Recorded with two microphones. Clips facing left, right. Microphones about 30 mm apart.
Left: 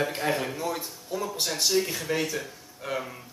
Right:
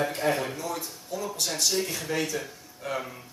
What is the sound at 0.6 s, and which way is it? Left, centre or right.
Speech, centre.